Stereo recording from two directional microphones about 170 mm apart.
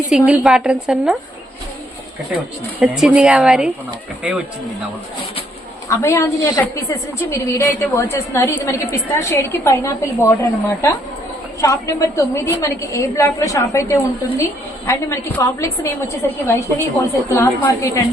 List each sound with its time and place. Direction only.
0.1 s a woman's voice: 5° right (ahead or behind)
2.3 s a woman's voice: 5° right (ahead or behind)
5.9 s a woman's voice: 15° left (ahead or behind)